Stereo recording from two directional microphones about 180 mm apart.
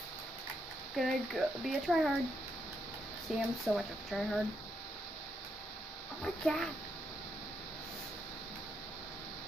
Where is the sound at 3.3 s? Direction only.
Centre (ahead or behind).